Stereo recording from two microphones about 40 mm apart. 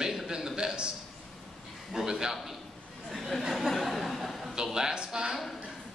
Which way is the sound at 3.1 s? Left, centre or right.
Centre.